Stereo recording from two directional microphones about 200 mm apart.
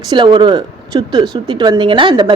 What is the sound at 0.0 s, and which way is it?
Speech, 20° right (ahead or behind).